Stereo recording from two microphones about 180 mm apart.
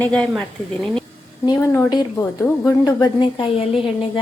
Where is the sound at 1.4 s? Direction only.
15° left (ahead or behind).